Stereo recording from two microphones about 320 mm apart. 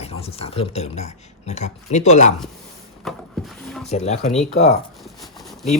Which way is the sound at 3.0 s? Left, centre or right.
Centre.